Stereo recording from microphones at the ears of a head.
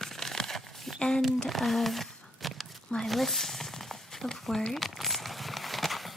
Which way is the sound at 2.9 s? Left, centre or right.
Centre.